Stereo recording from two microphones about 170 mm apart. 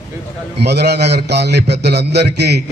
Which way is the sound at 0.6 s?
75° right (ahead or behind).